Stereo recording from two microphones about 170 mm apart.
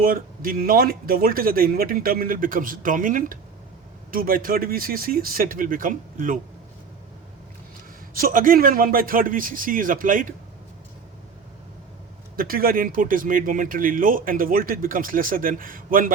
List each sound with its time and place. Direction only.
0.0 s speech: 60° right (ahead or behind)
8.1 s speech: 55° right (ahead or behind)
12.4 s speech: 60° right (ahead or behind)